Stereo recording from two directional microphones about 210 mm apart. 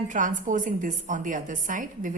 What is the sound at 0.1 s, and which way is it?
A woman's voice, 40° right (ahead or behind).